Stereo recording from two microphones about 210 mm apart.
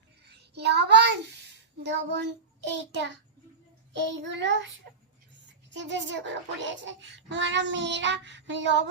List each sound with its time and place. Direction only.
0.3 s child singing: 50° right (ahead or behind)
1.8 s a child's voice: 55° right (ahead or behind)